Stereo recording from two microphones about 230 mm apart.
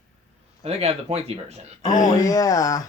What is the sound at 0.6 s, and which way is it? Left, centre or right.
Speech, right.